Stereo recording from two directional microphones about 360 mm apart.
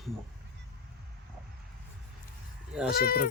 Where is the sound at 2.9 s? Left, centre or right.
Left.